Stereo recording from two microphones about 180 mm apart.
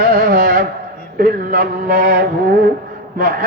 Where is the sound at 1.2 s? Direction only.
50° right (ahead or behind).